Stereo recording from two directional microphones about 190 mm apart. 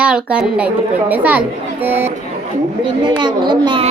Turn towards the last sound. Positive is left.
turn(degrees=-25)  # may be behind; listen again after turning